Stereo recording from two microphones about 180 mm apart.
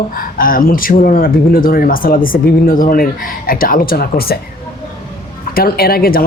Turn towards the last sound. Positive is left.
turn(degrees=55)  # may be behind; listen again after turning